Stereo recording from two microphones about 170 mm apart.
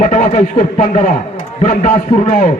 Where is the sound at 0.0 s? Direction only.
45° left (ahead or behind).